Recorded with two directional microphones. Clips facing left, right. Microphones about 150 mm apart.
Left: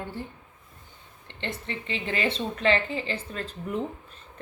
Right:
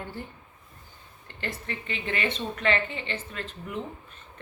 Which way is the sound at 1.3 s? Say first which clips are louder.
Left 1 dB; 25° left (ahead or behind).